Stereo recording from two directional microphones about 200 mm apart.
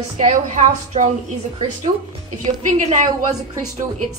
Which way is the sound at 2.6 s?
40° right (ahead or behind).